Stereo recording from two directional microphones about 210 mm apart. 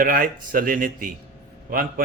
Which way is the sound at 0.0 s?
40° right (ahead or behind).